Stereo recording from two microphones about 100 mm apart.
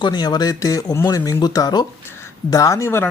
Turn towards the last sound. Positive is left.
turn(degrees=25)  # may be behind; listen again after turning